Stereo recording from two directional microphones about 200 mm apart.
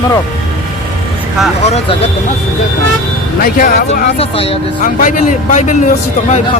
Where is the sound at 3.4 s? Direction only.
40° left (ahead or behind).